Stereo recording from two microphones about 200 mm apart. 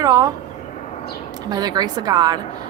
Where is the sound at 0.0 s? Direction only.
20° right (ahead or behind).